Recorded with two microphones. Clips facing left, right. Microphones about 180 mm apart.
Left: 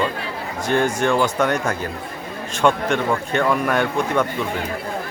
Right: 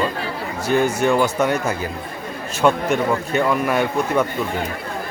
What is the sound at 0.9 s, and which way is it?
A man's voice, 5° right (ahead or behind).